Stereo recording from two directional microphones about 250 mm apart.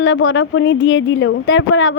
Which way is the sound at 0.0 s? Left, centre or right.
Left.